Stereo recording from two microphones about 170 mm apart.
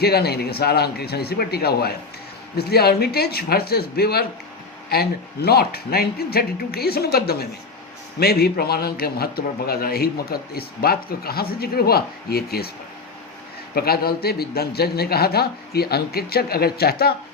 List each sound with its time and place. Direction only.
0.0 s a man's voice: 70° left (ahead or behind)
13.7 s a man's voice: 65° left (ahead or behind)